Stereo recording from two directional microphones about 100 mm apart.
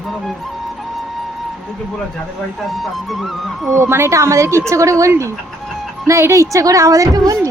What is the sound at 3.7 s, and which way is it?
A woman's voice, 25° right (ahead or behind).